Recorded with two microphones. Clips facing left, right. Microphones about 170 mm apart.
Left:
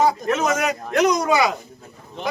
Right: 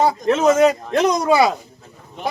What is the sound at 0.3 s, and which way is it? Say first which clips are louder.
Speech: right 7 dB; 30° right (ahead or behind).